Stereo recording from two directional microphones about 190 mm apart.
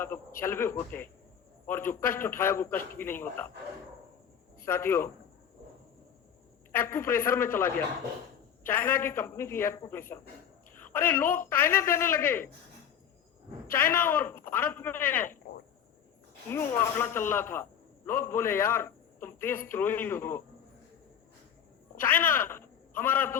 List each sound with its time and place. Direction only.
0.0 s a man's voice: 10° left (ahead or behind)
4.6 s a man's voice: 15° left (ahead or behind)
6.7 s a man's voice: 10° left (ahead or behind)
13.7 s a man's voice: 10° left (ahead or behind)
16.5 s a man's voice: 10° left (ahead or behind)
21.9 s a woman's voice: 10° left (ahead or behind)